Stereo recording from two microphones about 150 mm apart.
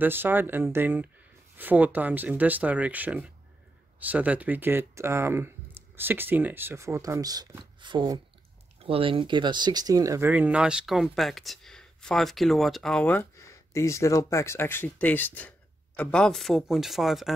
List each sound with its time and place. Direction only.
0.0 s speech: 15° right (ahead or behind)